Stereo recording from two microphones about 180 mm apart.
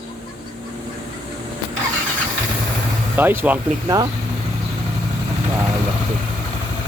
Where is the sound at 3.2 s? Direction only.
10° right (ahead or behind).